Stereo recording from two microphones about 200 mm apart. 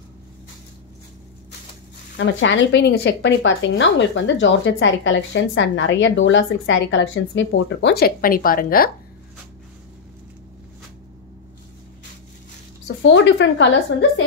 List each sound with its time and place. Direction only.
2.1 s speech: 65° left (ahead or behind); by 8.9 s 45° left (ahead or behind)
12.8 s a woman's voice: 65° left (ahead or behind)